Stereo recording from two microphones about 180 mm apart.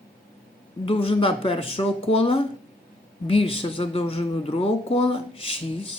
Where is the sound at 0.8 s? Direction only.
30° left (ahead or behind).